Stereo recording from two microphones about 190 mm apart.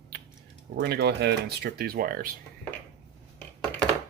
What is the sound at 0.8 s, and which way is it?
Speech, 60° right (ahead or behind).